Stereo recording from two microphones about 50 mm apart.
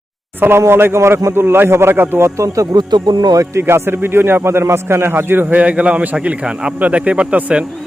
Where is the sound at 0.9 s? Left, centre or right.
Right.